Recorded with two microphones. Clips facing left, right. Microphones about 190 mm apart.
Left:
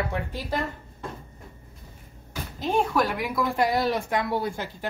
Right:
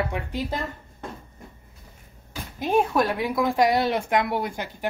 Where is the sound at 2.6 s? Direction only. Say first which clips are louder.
Right 2 dB; 25° right (ahead or behind).